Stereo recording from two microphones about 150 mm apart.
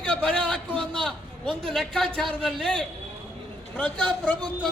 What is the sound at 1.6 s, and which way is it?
A man's voice, centre (ahead or behind).